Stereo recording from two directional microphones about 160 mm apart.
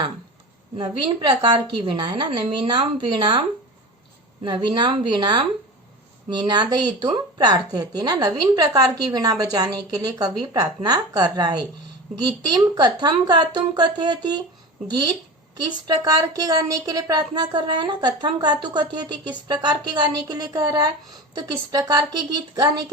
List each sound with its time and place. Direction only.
0.8 s a woman's voice: 30° right (ahead or behind)
4.4 s a woman's voice: 30° right (ahead or behind)